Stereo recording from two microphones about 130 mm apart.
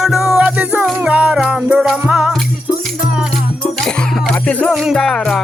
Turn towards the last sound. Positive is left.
turn(degrees=5)  # may be behind; listen again after turning